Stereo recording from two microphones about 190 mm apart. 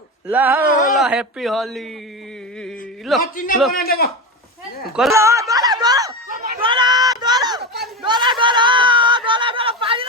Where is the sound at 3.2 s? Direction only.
45° left (ahead or behind).